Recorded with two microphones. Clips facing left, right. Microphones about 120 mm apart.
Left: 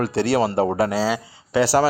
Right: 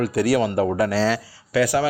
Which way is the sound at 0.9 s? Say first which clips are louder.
Right 1 dB; 15° left (ahead or behind).